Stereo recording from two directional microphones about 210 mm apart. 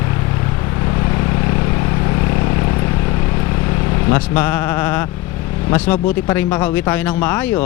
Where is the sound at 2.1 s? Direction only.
15° left (ahead or behind).